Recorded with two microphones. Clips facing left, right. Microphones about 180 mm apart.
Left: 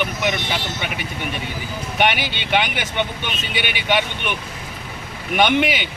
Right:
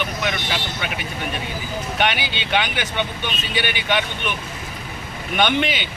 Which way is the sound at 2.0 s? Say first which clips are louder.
Left 3 dB; 15° left (ahead or behind).